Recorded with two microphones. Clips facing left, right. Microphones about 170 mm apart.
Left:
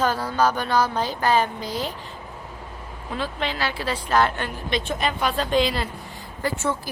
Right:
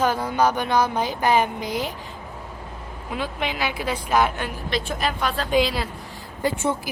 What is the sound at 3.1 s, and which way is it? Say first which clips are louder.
A woman's voice: even; 15° right (ahead or behind).